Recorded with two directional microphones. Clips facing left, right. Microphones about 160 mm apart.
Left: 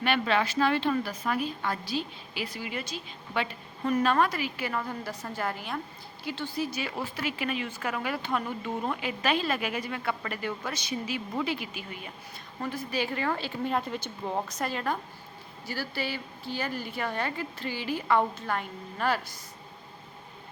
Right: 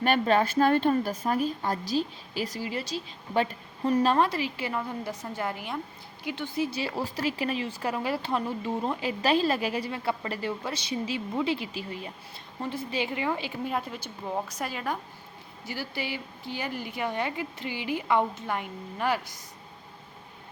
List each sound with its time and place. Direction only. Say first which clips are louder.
0.0 s a woman's voice: right 3 dB; 45° right (ahead or behind); by 19.4 s 15° right (ahead or behind)